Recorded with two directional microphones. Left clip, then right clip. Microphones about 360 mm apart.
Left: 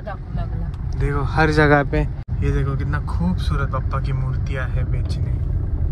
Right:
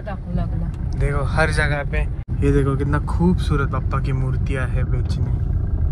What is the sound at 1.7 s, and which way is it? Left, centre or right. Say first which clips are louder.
Speech: left 8 dB; left.